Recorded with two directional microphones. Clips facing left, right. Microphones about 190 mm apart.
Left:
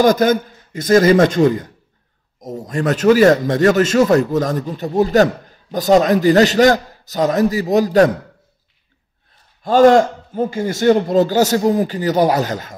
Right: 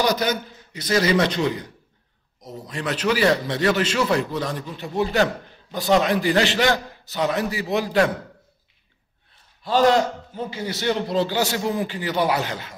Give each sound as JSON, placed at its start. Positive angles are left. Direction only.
{"t": 0.0, "sound": "a man's voice", "side_deg": 45}
{"t": 9.6, "sound": "a man's voice", "side_deg": 50}